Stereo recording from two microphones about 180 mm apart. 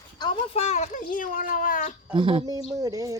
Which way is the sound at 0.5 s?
40° left (ahead or behind).